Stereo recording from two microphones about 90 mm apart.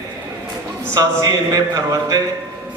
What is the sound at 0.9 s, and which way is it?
A man's voice, 40° right (ahead or behind).